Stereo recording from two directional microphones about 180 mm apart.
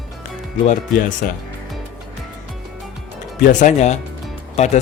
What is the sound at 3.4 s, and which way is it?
Speech, 45° left (ahead or behind).